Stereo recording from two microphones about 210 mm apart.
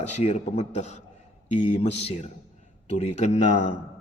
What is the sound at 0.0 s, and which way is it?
A man's voice, 35° left (ahead or behind).